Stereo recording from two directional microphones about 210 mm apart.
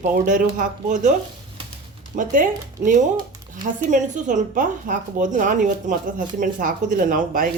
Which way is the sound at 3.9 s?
35° right (ahead or behind).